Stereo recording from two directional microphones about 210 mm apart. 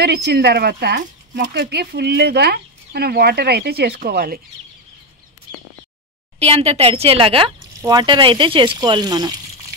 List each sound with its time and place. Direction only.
0.0 s speech: 50° right (ahead or behind)
6.4 s speech: 30° right (ahead or behind)